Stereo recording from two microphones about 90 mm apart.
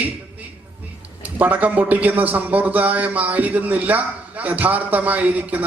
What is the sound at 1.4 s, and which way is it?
Speech, 20° right (ahead or behind).